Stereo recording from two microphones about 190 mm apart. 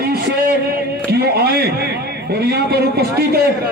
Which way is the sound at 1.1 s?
55° right (ahead or behind).